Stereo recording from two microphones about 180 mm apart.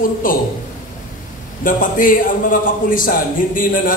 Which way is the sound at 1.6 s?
45° left (ahead or behind).